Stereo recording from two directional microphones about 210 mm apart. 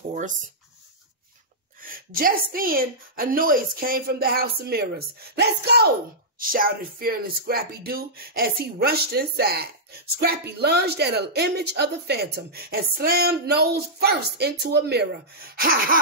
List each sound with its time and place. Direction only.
1.8 s speech: 40° right (ahead or behind)